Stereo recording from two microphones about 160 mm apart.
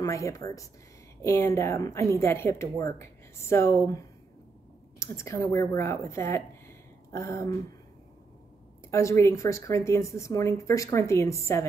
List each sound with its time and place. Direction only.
0.0 s speech: 20° left (ahead or behind)
8.9 s speech: 15° left (ahead or behind)